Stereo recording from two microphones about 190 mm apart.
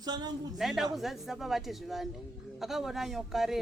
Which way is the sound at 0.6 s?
Centre (ahead or behind).